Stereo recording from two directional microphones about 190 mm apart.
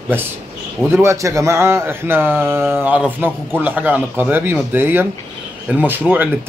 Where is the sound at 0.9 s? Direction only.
15° right (ahead or behind).